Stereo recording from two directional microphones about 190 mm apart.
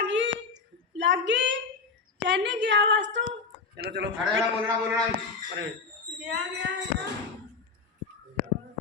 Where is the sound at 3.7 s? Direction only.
60° right (ahead or behind).